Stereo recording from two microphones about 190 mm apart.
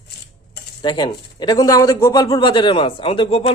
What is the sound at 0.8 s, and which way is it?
Speech, 25° left (ahead or behind).